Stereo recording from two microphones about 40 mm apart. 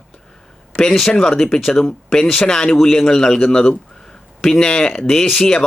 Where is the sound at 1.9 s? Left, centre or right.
Left.